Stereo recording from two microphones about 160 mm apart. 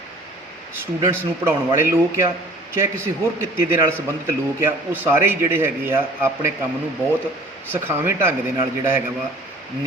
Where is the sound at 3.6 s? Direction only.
15° right (ahead or behind).